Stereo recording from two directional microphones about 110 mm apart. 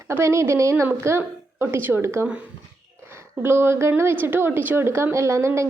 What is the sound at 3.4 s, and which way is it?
A woman's voice, 20° right (ahead or behind).